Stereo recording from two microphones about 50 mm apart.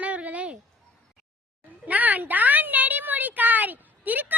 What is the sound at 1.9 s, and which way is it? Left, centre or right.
Speech, right.